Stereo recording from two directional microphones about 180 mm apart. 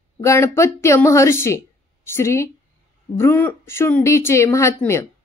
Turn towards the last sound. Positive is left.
turn(degrees=15)  # may be behind; listen again after turning